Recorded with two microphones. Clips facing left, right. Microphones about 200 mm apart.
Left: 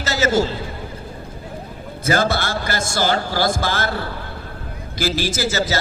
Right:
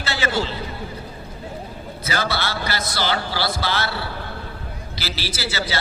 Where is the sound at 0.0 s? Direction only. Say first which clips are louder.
Left 5 dB; 40° left (ahead or behind).